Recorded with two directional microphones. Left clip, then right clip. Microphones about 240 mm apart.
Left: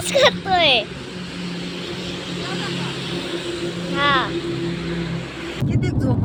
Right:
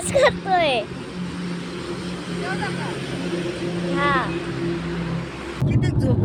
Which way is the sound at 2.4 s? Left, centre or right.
Right.